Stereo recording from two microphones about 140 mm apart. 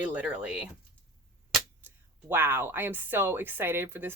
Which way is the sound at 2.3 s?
15° right (ahead or behind).